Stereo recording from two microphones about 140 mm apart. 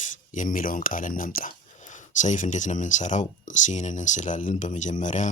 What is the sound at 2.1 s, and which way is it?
Speech, 60° left (ahead or behind).